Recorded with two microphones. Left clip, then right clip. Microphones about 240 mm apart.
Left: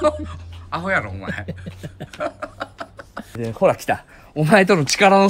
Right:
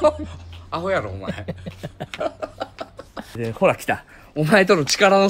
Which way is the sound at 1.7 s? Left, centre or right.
Right.